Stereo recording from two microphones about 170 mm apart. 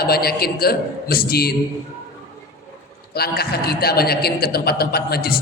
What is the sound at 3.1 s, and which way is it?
A man's voice, 65° left (ahead or behind).